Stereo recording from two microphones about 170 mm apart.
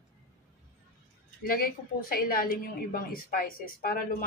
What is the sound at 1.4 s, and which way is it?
A woman's voice, 60° left (ahead or behind).